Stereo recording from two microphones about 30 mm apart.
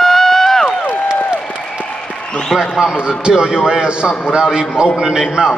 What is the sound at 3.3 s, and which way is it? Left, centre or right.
A man's voice, right.